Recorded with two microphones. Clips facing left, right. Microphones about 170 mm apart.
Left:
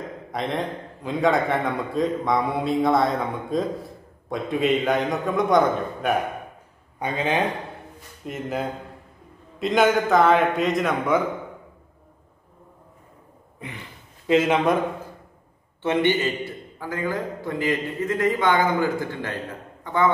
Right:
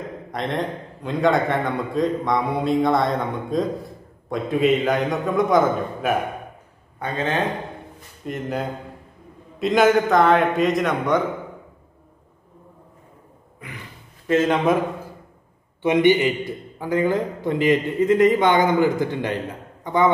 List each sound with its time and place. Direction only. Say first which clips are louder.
0.3 s a man's voice: right 1 dB; centre (ahead or behind)
7.0 s a man's voice: even; 15° left (ahead or behind)
8.3 s a man's voice: right 1 dB; centre (ahead or behind)
14.2 s a man's voice: even; 15° left (ahead or behind)
15.8 s a man's voice: right 5 dB; 15° right (ahead or behind)